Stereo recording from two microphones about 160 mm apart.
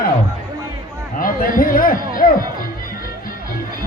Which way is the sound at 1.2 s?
60° left (ahead or behind).